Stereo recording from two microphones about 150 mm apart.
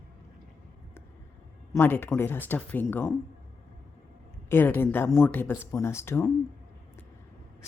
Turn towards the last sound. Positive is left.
turn(degrees=15)  # may be behind; listen again after turning